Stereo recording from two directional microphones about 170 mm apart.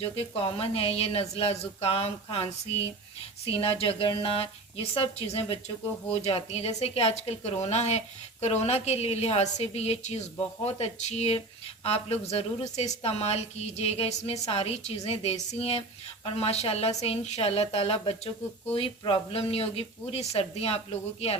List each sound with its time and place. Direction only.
0.0 s speech: 35° left (ahead or behind)